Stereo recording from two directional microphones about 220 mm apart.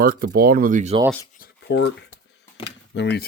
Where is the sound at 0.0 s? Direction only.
40° right (ahead or behind).